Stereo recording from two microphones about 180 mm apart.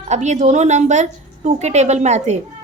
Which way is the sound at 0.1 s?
40° right (ahead or behind).